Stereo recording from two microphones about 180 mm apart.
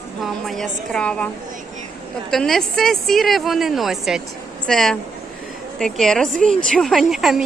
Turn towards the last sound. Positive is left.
turn(degrees=0)  # may be behind; listen again after turning